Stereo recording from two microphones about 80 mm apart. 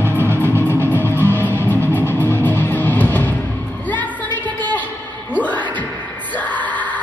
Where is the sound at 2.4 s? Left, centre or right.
Left.